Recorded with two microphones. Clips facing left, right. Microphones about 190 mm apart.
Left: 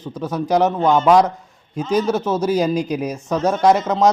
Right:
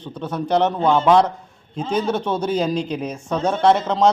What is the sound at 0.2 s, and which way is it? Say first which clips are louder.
A man's voice: left 2 dB; 5° left (ahead or behind).